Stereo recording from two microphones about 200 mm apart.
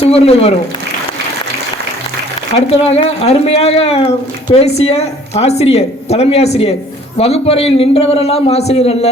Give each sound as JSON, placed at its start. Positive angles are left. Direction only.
{"t": 0.0, "sound": "speech", "side_deg": 30}
{"t": 2.6, "sound": "a man's voice", "side_deg": 30}